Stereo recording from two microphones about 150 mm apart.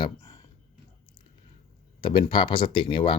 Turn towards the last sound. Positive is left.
turn(degrees=35)  # may be behind; listen again after turning